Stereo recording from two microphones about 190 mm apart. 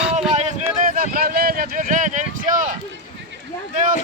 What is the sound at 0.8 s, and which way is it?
Speech, 50° right (ahead or behind).